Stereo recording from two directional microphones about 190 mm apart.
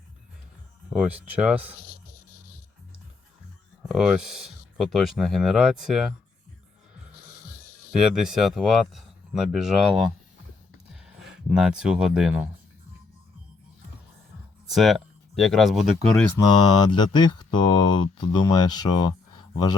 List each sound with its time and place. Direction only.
0.9 s speech: 5° right (ahead or behind)
3.8 s speech: 5° right (ahead or behind)
7.9 s speech: 5° right (ahead or behind)
14.7 s speech: centre (ahead or behind)
16.5 s speech: 25° left (ahead or behind)